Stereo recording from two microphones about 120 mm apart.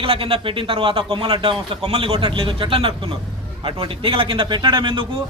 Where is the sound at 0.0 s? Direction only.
50° right (ahead or behind).